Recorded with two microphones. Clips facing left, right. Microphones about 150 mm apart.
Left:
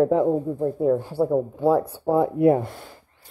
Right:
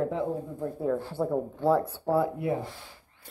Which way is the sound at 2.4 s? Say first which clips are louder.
Left 12 dB; 55° left (ahead or behind).